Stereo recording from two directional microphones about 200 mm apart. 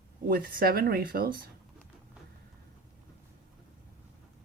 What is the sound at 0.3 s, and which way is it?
Speech, 50° right (ahead or behind).